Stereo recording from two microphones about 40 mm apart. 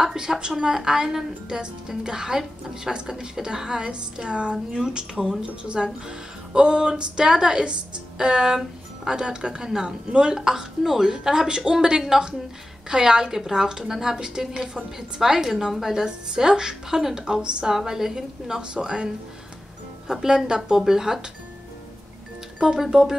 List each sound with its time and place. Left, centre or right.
0.0 s speech: centre
10.3 s speech: centre
17.7 s speech: centre
22.6 s speech: centre